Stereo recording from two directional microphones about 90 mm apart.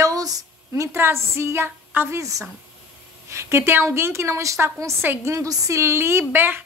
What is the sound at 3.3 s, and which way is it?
A woman's voice, 30° right (ahead or behind).